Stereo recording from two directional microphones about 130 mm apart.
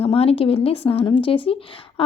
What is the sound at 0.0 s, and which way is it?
A woman's voice, 50° left (ahead or behind).